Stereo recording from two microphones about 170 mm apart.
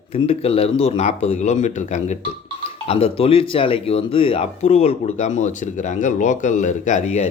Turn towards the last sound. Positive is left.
turn(degrees=40)  # may be behind; listen again after turning